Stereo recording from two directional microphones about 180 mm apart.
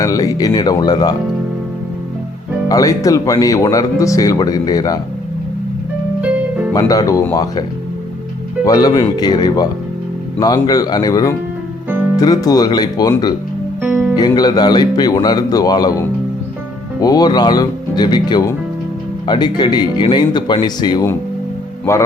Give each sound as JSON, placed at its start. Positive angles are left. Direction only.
{"t": 0.0, "sound": "speech", "side_deg": 20}
{"t": 2.6, "sound": "speech", "side_deg": 20}
{"t": 6.7, "sound": "speech", "side_deg": 20}
{"t": 8.6, "sound": "speech", "side_deg": 20}
{"t": 13.8, "sound": "music", "side_deg": -10}
{"t": 14.2, "sound": "speech", "side_deg": 20}
{"t": 17.0, "sound": "speech", "side_deg": 20}